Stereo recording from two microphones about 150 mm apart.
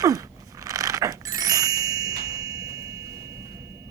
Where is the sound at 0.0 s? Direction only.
25° right (ahead or behind).